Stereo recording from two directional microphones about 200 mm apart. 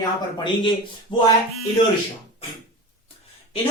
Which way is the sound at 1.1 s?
25° left (ahead or behind).